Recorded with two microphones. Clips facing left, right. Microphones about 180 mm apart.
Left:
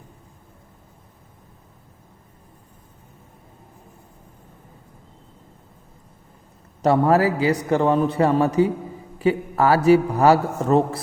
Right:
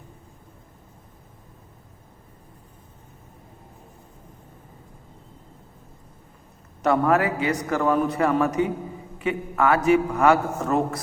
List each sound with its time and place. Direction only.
6.8 s a man's voice: 30° left (ahead or behind)